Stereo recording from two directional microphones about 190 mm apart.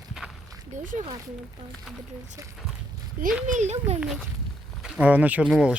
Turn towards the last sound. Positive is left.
turn(degrees=-5)  # may be behind; listen again after turning